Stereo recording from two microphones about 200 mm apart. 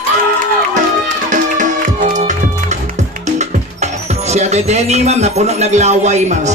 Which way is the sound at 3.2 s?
35° right (ahead or behind).